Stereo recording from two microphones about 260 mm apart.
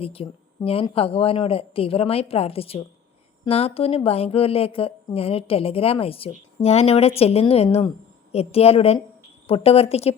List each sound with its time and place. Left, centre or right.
0.0 s speech: left